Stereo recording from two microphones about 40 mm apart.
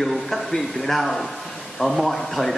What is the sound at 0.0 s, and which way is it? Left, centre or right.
A man's voice, centre.